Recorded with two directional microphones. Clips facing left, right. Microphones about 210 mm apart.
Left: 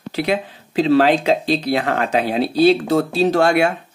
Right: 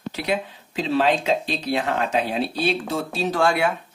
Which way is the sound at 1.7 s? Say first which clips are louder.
Left 4 dB; 65° left (ahead or behind).